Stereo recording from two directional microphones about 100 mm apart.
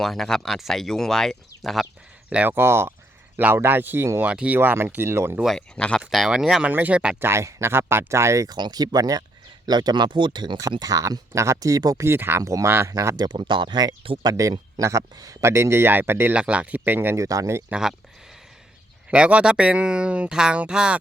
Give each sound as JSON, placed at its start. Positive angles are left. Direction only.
{"t": 0.0, "sound": "speech", "side_deg": 5}
{"t": 2.3, "sound": "speech", "side_deg": -20}
{"t": 5.5, "sound": "speech", "side_deg": 10}
{"t": 6.0, "sound": "speech", "side_deg": -5}
{"t": 7.2, "sound": "speech", "side_deg": -25}
{"t": 8.4, "sound": "speech", "side_deg": -45}
{"t": 14.0, "sound": "speech", "side_deg": -60}
{"t": 14.3, "sound": "speech", "side_deg": -35}
{"t": 17.2, "sound": "speech", "side_deg": -35}
{"t": 17.7, "sound": "speech", "side_deg": -5}
{"t": 19.1, "sound": "speech", "side_deg": -10}